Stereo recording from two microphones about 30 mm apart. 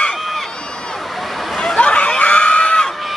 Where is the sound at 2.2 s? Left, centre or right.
Left.